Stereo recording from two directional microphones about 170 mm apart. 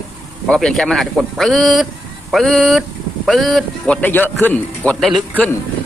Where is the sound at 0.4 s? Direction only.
5° left (ahead or behind).